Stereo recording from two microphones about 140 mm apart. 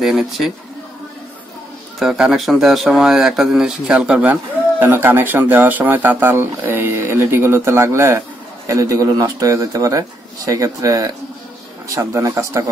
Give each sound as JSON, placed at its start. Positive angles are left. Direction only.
{"t": 0.0, "sound": "speech", "side_deg": 0}
{"t": 2.0, "sound": "a man's voice", "side_deg": -5}